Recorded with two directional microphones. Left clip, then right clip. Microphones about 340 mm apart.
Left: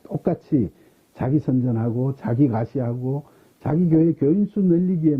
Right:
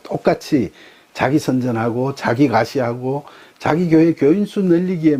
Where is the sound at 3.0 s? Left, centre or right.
Centre.